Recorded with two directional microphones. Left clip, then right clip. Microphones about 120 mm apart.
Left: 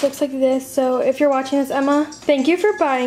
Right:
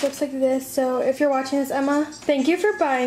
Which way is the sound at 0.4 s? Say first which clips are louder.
Left 3 dB; 15° left (ahead or behind).